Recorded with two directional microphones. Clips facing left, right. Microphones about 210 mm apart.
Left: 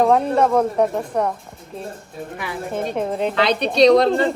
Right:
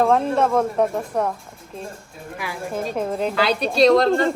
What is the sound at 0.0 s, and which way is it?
Speech, centre (ahead or behind).